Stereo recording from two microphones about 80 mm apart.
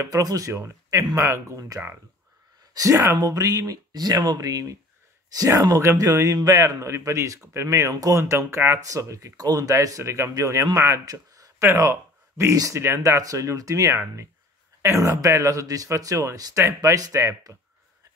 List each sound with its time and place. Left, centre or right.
0.0 s speech: right
2.7 s speech: right
11.6 s speech: right